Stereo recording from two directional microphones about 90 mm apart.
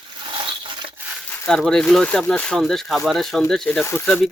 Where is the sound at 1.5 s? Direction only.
5° left (ahead or behind).